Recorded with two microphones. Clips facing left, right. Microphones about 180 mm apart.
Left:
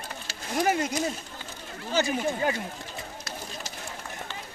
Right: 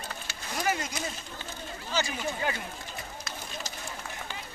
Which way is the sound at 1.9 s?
50° left (ahead or behind).